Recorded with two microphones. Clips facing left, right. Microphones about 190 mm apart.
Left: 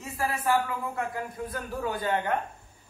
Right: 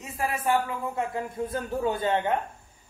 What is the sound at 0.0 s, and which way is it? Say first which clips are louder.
A man's voice: right 1 dB; 20° right (ahead or behind).